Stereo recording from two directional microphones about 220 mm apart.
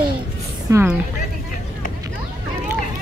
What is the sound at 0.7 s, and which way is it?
Speech, 5° right (ahead or behind).